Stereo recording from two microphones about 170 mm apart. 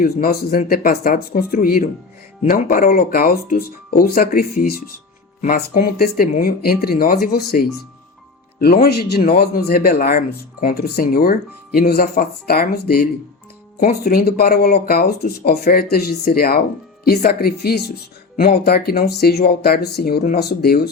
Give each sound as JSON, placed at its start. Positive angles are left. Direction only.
{"t": 0.0, "sound": "speech", "side_deg": 60}